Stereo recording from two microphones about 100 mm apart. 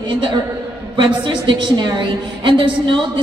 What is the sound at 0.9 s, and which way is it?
A woman's voice, 55° right (ahead or behind).